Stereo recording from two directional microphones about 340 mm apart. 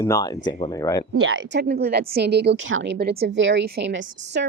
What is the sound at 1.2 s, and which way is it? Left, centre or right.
A woman's voice, right.